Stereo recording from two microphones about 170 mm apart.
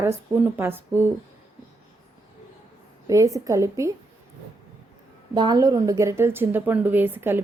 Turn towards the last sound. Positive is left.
turn(degrees=-10)  # may be behind; listen again after turning